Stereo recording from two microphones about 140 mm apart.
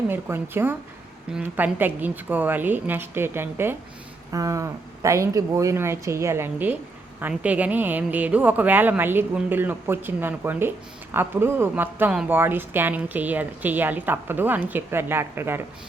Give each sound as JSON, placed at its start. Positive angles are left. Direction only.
{"t": 0.1, "sound": "speech", "side_deg": -15}